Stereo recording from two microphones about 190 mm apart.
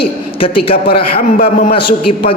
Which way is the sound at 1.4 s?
50° left (ahead or behind).